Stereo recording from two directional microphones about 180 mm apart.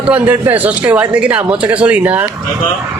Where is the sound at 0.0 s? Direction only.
10° right (ahead or behind).